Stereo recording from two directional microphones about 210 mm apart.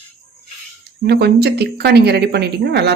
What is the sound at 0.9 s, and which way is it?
A woman's voice, 50° right (ahead or behind).